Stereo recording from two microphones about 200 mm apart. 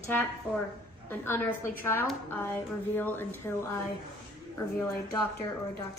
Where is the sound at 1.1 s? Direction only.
10° left (ahead or behind).